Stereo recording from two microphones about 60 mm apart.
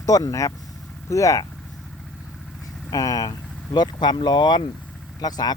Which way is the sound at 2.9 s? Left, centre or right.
Left.